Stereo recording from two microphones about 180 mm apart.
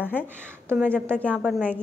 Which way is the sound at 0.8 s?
5° left (ahead or behind).